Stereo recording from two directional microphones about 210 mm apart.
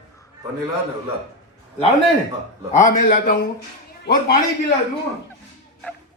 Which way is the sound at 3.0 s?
40° left (ahead or behind).